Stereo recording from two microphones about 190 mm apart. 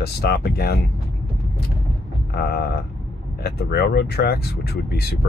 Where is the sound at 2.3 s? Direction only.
55° left (ahead or behind).